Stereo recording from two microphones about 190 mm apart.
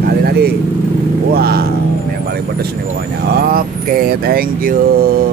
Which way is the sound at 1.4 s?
55° right (ahead or behind).